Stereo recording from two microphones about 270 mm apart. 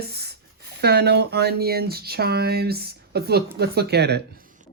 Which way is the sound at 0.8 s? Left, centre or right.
Right.